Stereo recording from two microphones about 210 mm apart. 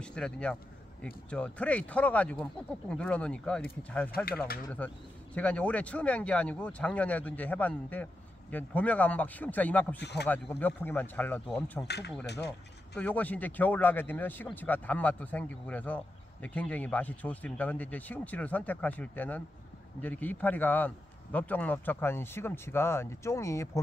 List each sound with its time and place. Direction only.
0.0 s speech: 5° left (ahead or behind)
4.6 s speech: 5° left (ahead or behind)
9.9 s speech: 55° left (ahead or behind)
10.2 s speech: 10° left (ahead or behind)
12.9 s speech: 5° left (ahead or behind)